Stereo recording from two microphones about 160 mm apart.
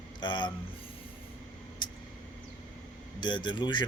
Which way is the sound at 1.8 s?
25° left (ahead or behind).